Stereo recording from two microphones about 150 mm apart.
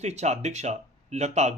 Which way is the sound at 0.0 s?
50° right (ahead or behind).